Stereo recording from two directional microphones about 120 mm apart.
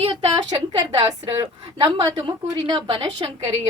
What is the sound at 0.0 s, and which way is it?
A woman's voice, 45° right (ahead or behind).